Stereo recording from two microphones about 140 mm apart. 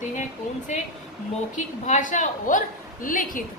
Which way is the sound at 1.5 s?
60° left (ahead or behind).